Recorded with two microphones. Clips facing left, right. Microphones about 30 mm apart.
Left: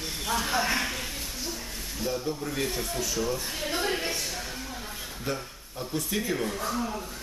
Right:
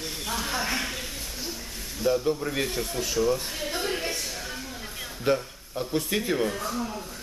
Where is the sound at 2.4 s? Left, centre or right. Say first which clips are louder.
Right 2 dB; centre.